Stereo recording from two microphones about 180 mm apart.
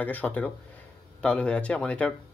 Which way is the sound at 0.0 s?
10° left (ahead or behind).